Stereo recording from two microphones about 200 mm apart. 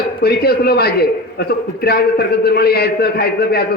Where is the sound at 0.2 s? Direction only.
50° left (ahead or behind).